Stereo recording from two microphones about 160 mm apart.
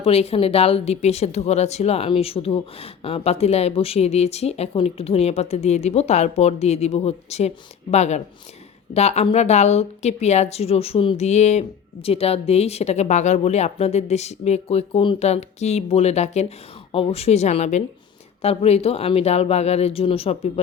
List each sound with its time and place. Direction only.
0.0 s a woman's voice: 40° left (ahead or behind)